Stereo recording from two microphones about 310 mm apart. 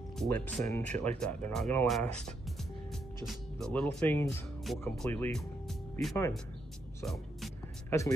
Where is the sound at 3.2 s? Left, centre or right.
Centre.